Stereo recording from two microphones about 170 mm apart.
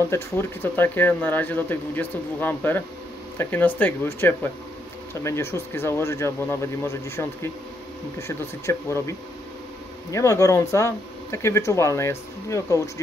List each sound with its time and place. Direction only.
0.1 s speech: 15° left (ahead or behind)
10.1 s speech: 20° left (ahead or behind)